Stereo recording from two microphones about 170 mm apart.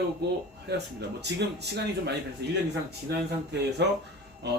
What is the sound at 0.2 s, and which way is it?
Speech, 70° right (ahead or behind).